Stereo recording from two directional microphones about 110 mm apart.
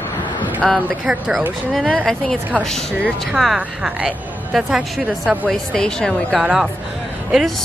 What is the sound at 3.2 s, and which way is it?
A woman's voice, centre (ahead or behind).